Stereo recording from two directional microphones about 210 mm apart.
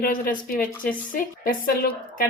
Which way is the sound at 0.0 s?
40° left (ahead or behind).